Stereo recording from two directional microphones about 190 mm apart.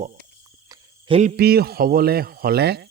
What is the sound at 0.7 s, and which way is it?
Cricket, 25° right (ahead or behind).